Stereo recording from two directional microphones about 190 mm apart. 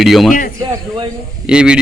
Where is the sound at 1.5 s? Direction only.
5° right (ahead or behind).